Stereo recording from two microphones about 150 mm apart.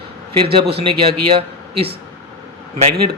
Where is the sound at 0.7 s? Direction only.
40° right (ahead or behind).